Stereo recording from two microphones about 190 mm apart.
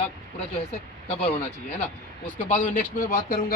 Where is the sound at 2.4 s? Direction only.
40° left (ahead or behind).